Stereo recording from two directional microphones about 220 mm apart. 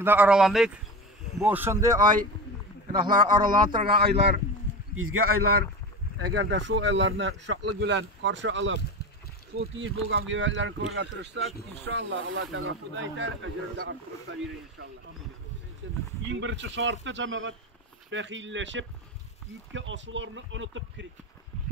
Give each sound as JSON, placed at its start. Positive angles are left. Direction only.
{"t": 0.0, "sound": "speech", "side_deg": -10}
{"t": 3.3, "sound": "speech", "side_deg": -20}
{"t": 4.0, "sound": "a man's voice", "side_deg": -50}
{"t": 4.9, "sound": "speech", "side_deg": -70}
{"t": 6.2, "sound": "speech", "side_deg": -50}
{"t": 9.8, "sound": "speech", "side_deg": -60}
{"t": 15.8, "sound": "speech", "side_deg": -55}